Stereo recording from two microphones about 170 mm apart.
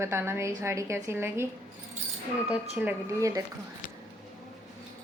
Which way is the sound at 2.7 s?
15° right (ahead or behind).